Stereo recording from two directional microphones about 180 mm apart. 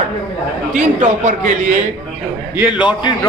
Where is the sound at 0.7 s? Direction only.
45° right (ahead or behind).